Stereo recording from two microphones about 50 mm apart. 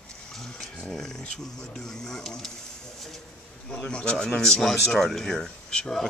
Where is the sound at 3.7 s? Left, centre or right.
Left.